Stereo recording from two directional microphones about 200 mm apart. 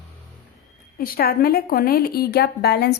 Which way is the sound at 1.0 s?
50° left (ahead or behind).